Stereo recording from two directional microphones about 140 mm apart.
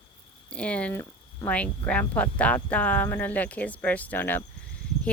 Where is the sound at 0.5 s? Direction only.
10° left (ahead or behind).